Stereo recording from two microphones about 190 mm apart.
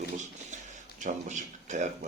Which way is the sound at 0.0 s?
40° right (ahead or behind).